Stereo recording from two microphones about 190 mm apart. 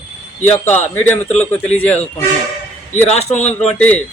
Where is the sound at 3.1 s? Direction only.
35° left (ahead or behind).